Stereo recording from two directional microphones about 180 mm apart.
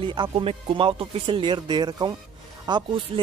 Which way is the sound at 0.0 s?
30° right (ahead or behind).